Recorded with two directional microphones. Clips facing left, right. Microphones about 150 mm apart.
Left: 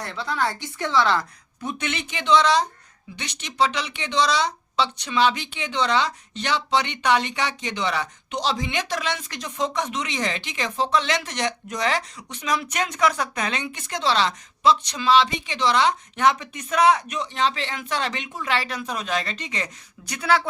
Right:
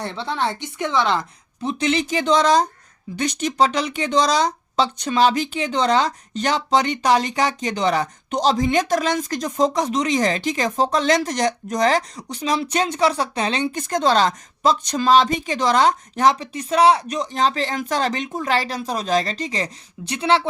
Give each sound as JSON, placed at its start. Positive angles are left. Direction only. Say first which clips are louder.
{"t": 0.0, "sound": "speech", "louder": "right 2 dB", "side_deg": -30}
{"t": 1.6, "sound": "speech", "louder": "right 8 dB", "side_deg": -35}